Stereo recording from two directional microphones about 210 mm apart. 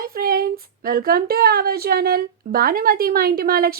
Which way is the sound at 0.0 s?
45° right (ahead or behind).